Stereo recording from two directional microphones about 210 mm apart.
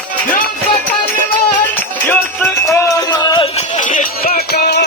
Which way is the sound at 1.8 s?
10° left (ahead or behind).